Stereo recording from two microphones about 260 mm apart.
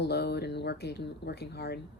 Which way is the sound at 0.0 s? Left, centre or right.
Left.